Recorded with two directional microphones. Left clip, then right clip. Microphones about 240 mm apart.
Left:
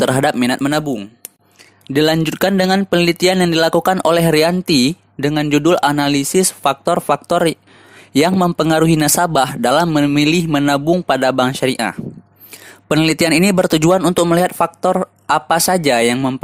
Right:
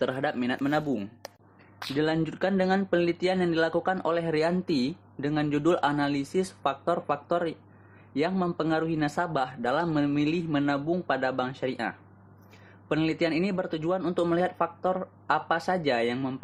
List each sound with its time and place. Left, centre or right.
0.0 s speech: left
2.0 s speech: left